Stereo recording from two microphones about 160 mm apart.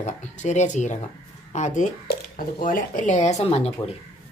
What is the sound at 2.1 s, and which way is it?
Speech, 60° left (ahead or behind).